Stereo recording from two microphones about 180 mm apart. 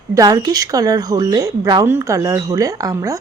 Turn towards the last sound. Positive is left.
turn(degrees=-20)  # may be behind; listen again after turning